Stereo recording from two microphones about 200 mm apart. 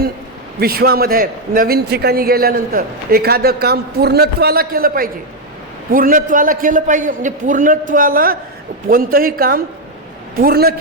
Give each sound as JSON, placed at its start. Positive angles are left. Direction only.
{"t": 0.6, "sound": "a man's voice", "side_deg": -50}